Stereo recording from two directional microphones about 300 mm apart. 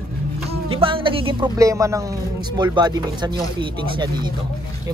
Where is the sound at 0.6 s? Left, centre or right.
Centre.